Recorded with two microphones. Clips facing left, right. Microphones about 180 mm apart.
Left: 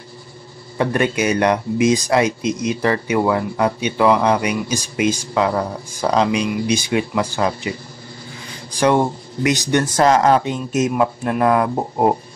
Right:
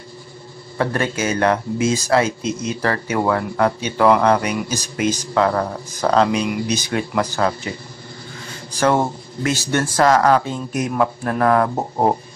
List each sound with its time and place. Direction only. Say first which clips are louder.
0.7 s a man's voice: left 3 dB; 15° left (ahead or behind)
9.4 s a man's voice: left 3 dB; 15° left (ahead or behind)